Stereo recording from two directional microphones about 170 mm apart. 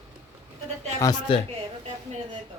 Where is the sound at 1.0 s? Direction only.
20° left (ahead or behind).